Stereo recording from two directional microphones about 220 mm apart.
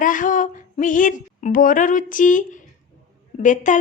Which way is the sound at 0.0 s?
35° left (ahead or behind).